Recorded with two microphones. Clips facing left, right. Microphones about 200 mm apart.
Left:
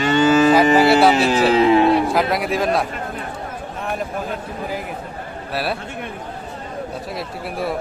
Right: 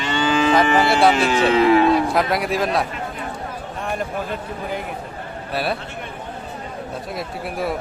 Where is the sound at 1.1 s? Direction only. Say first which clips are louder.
Left 1 dB; 35° left (ahead or behind).